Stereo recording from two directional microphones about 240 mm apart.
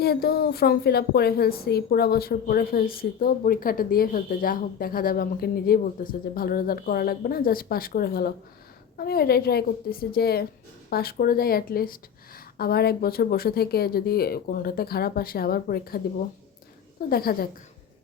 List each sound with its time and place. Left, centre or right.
0.0 s a woman's voice: left
17.1 s a woman's voice: left